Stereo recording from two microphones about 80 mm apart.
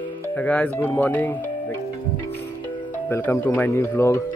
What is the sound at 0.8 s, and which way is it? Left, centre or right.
Speech, left.